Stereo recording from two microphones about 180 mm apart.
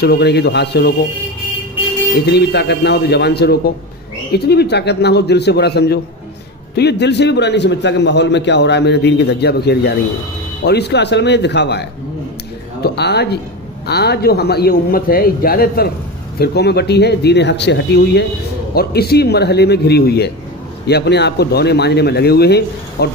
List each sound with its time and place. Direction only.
0.0 s a man's voice: 65° left (ahead or behind)
2.2 s a man's voice: 65° left (ahead or behind)